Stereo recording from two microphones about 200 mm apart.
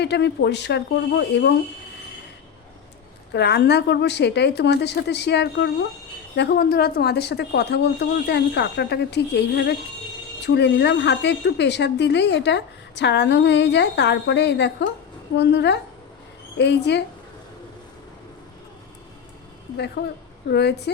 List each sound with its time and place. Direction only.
0.0 s a woman's voice: 55° left (ahead or behind)
3.3 s a woman's voice: 55° left (ahead or behind)
20.0 s a woman's voice: 55° left (ahead or behind)